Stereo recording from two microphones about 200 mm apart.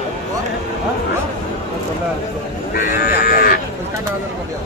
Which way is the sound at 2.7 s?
50° left (ahead or behind).